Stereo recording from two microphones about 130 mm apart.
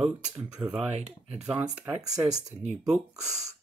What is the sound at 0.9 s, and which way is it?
Speech, 55° right (ahead or behind).